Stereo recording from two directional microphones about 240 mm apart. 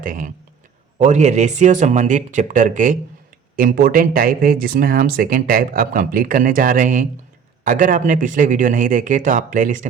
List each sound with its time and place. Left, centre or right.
0.0 s speech: right